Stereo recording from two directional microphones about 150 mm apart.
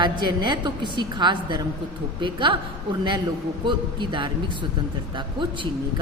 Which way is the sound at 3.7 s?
30° right (ahead or behind).